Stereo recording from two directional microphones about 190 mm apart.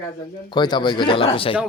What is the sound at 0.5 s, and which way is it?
Speech, 25° left (ahead or behind).